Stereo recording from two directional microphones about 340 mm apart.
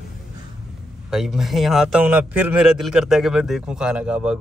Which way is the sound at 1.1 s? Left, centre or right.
Centre.